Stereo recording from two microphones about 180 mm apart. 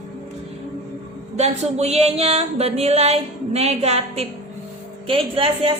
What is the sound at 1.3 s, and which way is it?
A woman's voice, 40° right (ahead or behind).